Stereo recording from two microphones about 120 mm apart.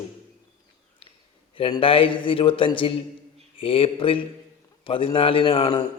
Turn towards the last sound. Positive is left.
turn(degrees=50)  # may be behind; listen again after turning